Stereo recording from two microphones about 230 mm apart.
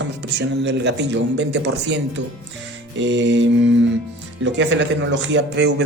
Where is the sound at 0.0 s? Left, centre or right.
Right.